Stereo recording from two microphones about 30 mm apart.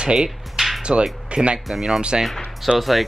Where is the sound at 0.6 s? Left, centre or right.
Right.